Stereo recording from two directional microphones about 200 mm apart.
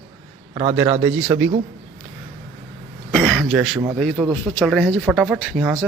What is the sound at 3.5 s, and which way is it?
Speech, centre (ahead or behind).